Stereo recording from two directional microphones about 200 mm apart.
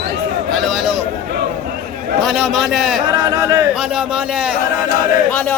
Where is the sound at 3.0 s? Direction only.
20° right (ahead or behind).